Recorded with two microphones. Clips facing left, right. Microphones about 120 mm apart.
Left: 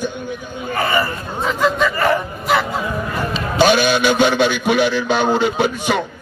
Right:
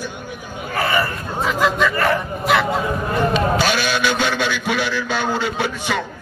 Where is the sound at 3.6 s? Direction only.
20° left (ahead or behind).